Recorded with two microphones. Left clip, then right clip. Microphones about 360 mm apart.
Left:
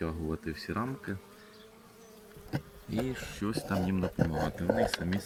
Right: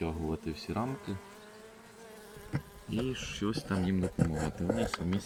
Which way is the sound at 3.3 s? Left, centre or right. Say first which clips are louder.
Right 1 dB; centre.